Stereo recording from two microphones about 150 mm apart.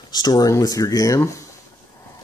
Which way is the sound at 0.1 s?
25° left (ahead or behind).